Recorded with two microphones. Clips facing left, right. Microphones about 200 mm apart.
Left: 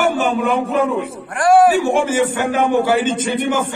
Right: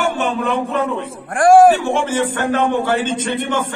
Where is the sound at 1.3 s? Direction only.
50° right (ahead or behind).